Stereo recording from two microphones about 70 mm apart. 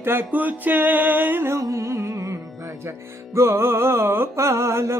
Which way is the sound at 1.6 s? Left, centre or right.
Right.